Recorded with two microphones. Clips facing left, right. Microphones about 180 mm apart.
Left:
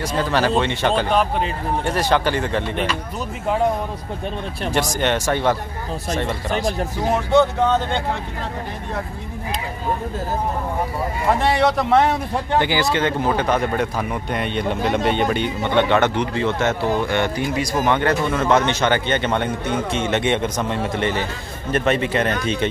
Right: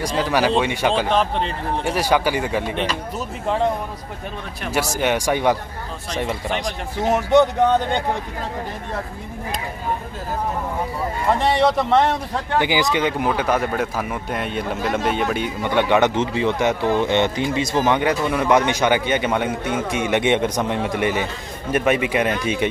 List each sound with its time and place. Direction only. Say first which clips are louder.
0.2 s a man's voice: even; 10° right (ahead or behind)
4.6 s a man's voice: even; 10° right (ahead or behind)
7.0 s a man's voice: right 2 dB; 20° right (ahead or behind)
11.3 s speech: right 1 dB; centre (ahead or behind)
12.5 s a man's voice: even; 15° right (ahead or behind)